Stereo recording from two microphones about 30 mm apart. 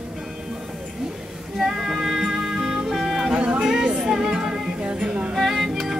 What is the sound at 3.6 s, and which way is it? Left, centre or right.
Music, right.